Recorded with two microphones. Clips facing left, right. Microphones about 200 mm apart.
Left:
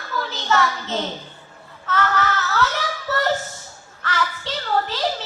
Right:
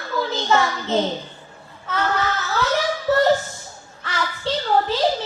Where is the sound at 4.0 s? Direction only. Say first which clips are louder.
Left 1 dB; 15° right (ahead or behind).